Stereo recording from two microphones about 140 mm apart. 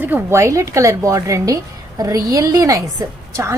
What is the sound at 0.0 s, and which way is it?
A woman's voice, 15° right (ahead or behind).